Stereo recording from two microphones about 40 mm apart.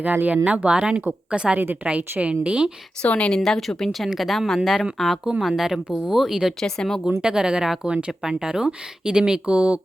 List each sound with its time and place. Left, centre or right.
0.0 s speech: right
1.8 s a woman's voice: right
2.2 s speech: right
3.0 s a woman's voice: left
3.3 s speech: centre
6.6 s speech: centre
7.0 s speech: right